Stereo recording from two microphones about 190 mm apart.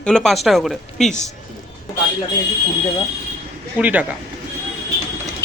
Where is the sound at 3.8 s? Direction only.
10° right (ahead or behind).